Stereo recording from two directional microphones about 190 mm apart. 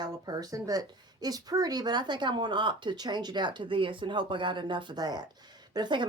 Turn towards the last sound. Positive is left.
turn(degrees=-25)  # may be behind; listen again after turning